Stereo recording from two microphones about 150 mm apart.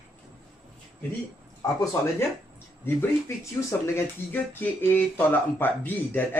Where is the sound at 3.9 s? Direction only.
15° left (ahead or behind).